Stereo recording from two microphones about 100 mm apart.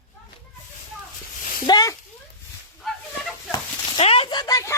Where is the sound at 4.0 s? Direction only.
70° left (ahead or behind).